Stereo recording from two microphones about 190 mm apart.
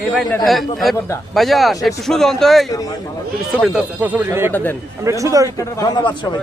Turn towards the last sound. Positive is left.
turn(degrees=25)  # may be behind; listen again after turning